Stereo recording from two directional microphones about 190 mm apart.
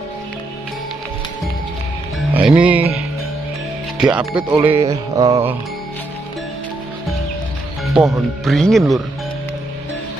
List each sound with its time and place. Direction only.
2.3 s music: 5° right (ahead or behind)
4.0 s speech: 5° right (ahead or behind)
4.5 s mantra: 10° right (ahead or behind)
7.9 s speech: centre (ahead or behind)